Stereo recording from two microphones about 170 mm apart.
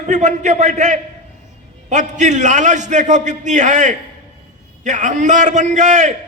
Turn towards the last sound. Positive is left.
turn(degrees=-45)  # may be behind; listen again after turning